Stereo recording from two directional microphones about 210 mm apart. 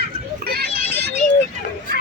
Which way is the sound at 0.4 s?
50° right (ahead or behind).